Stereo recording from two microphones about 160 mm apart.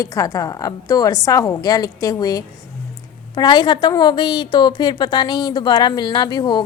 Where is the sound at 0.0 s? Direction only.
20° left (ahead or behind).